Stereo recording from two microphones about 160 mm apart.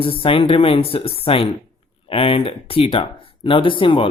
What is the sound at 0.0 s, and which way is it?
Speech, 35° left (ahead or behind).